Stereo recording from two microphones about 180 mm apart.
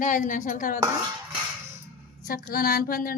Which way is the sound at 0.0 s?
45° left (ahead or behind).